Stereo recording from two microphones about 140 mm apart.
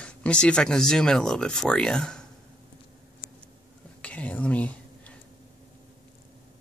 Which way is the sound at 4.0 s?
10° left (ahead or behind).